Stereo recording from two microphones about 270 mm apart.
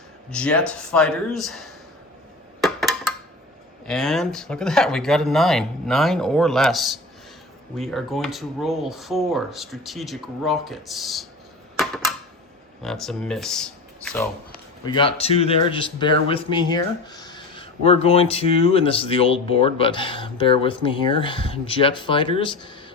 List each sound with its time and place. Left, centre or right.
0.3 s speech: centre
2.6 s a sound: centre
3.8 s speech: centre
12.8 s speech: centre
14.8 s speech: centre